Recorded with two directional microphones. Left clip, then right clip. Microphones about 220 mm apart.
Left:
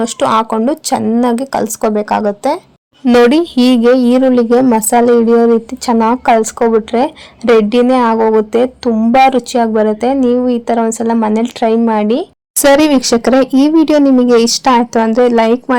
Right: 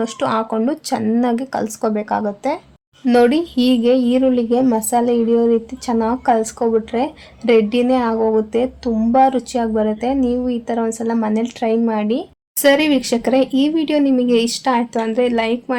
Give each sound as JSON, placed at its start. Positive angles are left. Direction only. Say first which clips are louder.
{"t": 0.0, "sound": "a woman's voice", "louder": "left 7 dB", "side_deg": 20}